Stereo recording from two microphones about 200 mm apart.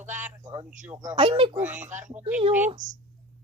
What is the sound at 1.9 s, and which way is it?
A woman's voice, 40° right (ahead or behind).